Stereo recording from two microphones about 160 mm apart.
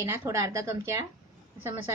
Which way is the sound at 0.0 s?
15° right (ahead or behind).